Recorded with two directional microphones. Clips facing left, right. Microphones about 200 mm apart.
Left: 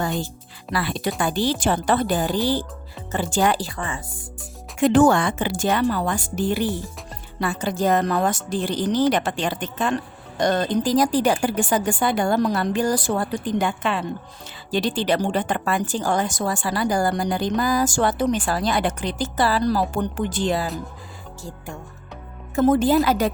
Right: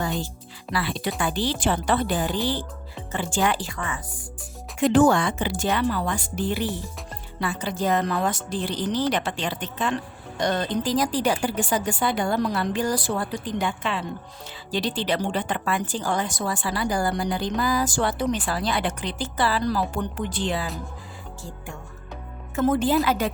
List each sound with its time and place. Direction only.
0.7 s a woman's voice: 45° left (ahead or behind); by 4.2 s 30° left (ahead or behind)
4.8 s a woman's voice: 55° left (ahead or behind)
22.5 s speech: 40° left (ahead or behind)